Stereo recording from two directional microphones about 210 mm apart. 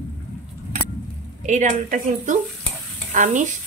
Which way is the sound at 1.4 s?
35° right (ahead or behind).